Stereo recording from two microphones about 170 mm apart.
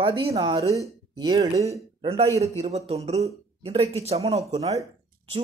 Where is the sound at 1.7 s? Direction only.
35° right (ahead or behind).